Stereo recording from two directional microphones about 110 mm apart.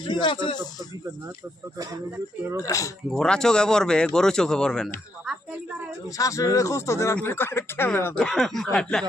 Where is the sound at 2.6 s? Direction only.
30° left (ahead or behind).